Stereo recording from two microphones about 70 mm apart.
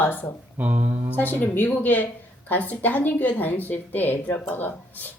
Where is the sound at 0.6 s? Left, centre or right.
Right.